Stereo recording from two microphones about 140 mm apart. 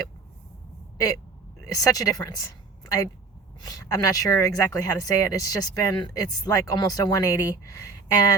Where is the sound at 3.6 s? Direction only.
25° left (ahead or behind).